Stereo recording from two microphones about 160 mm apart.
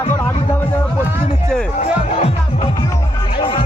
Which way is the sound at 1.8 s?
45° left (ahead or behind).